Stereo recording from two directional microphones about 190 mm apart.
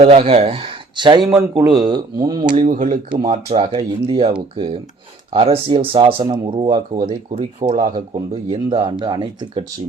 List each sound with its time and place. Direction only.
0.0 s speech: 30° right (ahead or behind)
1.2 s a man's voice: 5° right (ahead or behind)
1.5 s speech: 20° right (ahead or behind)
2.6 s speech: 45° right (ahead or behind)
3.1 s speech: 30° right (ahead or behind)
7.0 s speech: 35° right (ahead or behind)
8.4 s speech: 25° right (ahead or behind)